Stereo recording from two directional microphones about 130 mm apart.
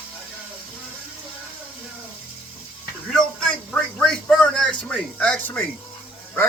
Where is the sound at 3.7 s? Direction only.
10° left (ahead or behind).